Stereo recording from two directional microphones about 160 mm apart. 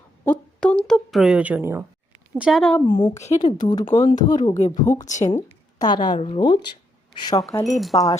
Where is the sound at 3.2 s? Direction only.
45° left (ahead or behind).